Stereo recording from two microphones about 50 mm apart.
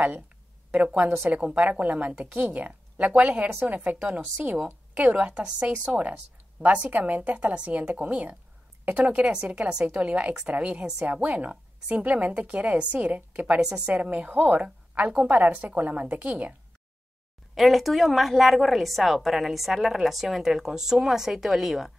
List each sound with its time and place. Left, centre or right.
1.3 s a woman's voice: right
5.1 s a woman's voice: centre
13.6 s a woman's voice: centre; by 16.5 s right
17.6 s a woman's voice: centre